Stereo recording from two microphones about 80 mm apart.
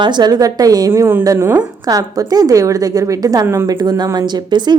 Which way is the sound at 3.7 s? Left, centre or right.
Right.